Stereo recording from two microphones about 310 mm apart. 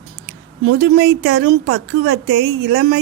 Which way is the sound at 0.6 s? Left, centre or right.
Right.